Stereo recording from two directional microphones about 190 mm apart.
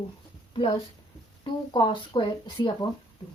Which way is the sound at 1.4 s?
25° left (ahead or behind).